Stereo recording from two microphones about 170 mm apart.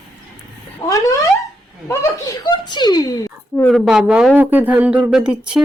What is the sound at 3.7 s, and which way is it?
A man's voice, centre (ahead or behind).